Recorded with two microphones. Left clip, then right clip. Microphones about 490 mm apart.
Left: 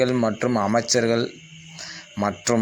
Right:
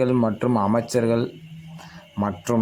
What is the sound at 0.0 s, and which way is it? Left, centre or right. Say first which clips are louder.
Speech: even; right.